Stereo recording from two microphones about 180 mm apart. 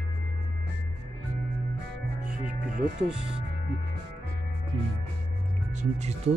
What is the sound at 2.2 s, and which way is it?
Music, 5° right (ahead or behind).